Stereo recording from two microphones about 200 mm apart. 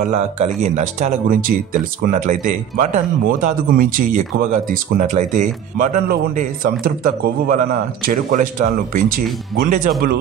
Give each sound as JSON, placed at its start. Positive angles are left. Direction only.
{"t": 0.0, "sound": "speech", "side_deg": -35}